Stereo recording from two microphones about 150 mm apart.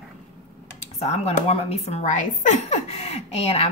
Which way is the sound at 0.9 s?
45° left (ahead or behind).